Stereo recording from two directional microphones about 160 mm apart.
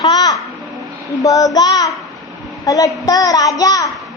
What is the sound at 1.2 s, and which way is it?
A child's voice, 20° left (ahead or behind).